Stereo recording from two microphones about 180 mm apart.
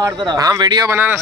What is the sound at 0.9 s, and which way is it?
Speech, 15° right (ahead or behind).